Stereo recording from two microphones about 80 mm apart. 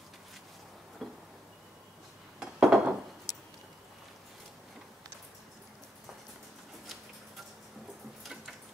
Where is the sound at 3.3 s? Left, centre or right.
Left.